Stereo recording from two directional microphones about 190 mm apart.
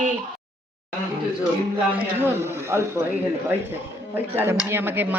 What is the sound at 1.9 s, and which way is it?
Speech, 10° right (ahead or behind).